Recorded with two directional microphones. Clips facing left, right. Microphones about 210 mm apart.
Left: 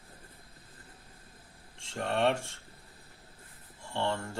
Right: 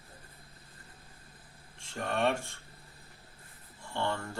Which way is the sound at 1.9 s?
25° left (ahead or behind).